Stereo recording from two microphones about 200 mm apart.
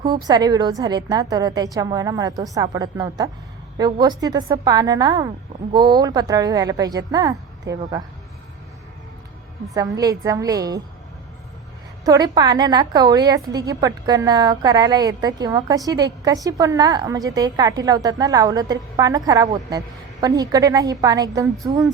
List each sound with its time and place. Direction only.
0.3 s a woman's voice: 20° right (ahead or behind)
9.7 s a woman's voice: 15° right (ahead or behind)
12.0 s a woman's voice: 20° right (ahead or behind)